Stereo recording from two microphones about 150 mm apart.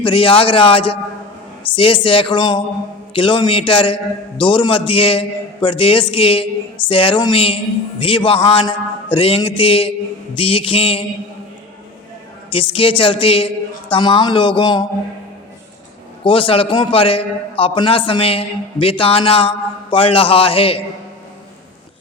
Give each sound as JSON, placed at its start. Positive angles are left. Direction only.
{"t": 0.0, "sound": "a man's voice", "side_deg": 35}
{"t": 12.5, "sound": "a man's voice", "side_deg": 35}
{"t": 16.2, "sound": "a man's voice", "side_deg": 35}